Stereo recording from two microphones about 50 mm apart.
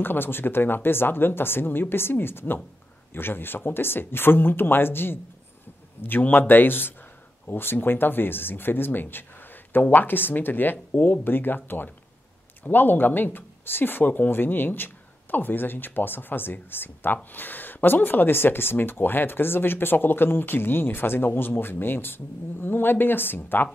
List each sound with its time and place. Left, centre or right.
0.0 s speech: left